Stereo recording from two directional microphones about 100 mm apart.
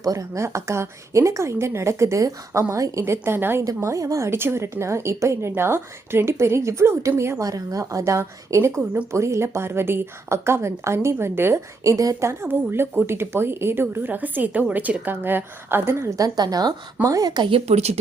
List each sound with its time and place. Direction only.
0.0 s a woman's voice: 35° right (ahead or behind)
17.5 s speech: 90° right